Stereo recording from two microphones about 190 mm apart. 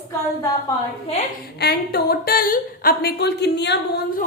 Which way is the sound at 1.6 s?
55° left (ahead or behind).